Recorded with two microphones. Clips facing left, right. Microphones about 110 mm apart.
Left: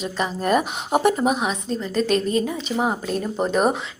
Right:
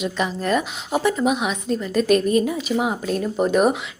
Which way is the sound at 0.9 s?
50° left (ahead or behind).